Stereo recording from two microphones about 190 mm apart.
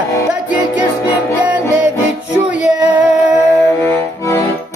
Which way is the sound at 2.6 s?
5° right (ahead or behind).